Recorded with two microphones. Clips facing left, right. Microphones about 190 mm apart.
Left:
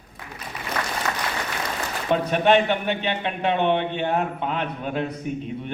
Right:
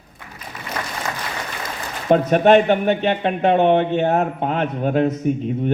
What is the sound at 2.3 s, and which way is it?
A man's voice, 45° right (ahead or behind).